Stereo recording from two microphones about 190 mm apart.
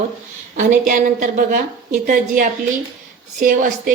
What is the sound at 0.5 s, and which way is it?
A woman's voice, 40° right (ahead or behind).